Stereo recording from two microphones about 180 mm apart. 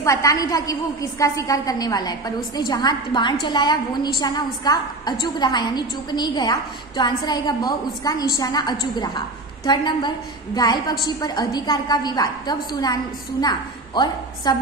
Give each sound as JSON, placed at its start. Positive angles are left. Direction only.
{"t": 0.0, "sound": "a woman's voice", "side_deg": 20}